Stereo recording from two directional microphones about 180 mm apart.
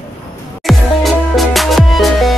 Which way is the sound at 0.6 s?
Centre (ahead or behind).